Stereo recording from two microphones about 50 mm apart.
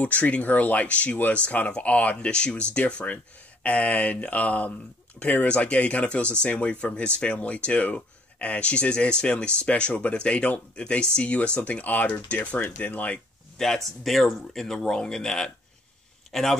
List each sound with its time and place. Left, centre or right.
0.0 s speech: left
13.6 s speech: centre